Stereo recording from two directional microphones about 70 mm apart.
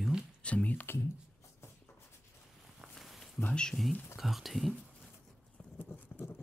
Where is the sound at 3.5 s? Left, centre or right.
Centre.